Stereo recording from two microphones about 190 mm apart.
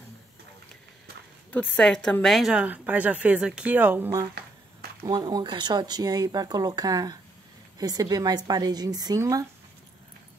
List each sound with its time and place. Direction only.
1.8 s speech: 5° left (ahead or behind); by 9.5 s 20° right (ahead or behind)